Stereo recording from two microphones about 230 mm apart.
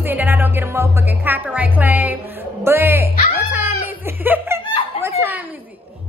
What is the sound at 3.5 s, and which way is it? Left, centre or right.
Laughter, centre.